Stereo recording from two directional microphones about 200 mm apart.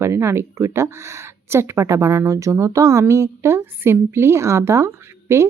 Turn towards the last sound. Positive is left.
turn(degrees=-15)  # may be behind; listen again after turning